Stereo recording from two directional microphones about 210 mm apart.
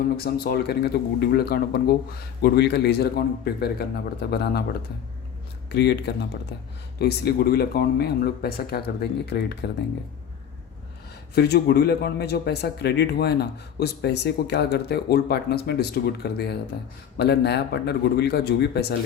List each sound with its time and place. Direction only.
0.2 s speech: 45° left (ahead or behind)
5.6 s speech: 55° left (ahead or behind)
11.3 s speech: 50° left (ahead or behind)